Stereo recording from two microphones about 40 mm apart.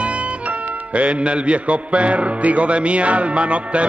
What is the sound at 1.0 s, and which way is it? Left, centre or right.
Music, right.